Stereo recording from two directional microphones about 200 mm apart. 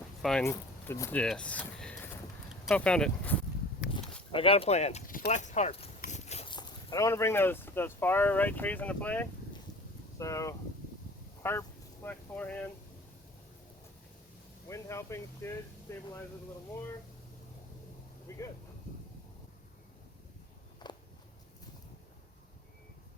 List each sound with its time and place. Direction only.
0.2 s speech: 5° left (ahead or behind)
0.4 s speech: 15° left (ahead or behind)
3.9 s speech: 25° left (ahead or behind); by 12.7 s 10° left (ahead or behind)
14.7 s speech: 15° left (ahead or behind)
18.3 s a sound: 15° left (ahead or behind)